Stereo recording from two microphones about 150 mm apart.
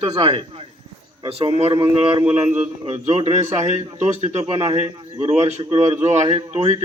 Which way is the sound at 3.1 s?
45° right (ahead or behind).